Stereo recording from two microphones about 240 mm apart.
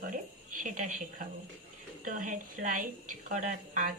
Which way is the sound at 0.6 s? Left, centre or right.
Right.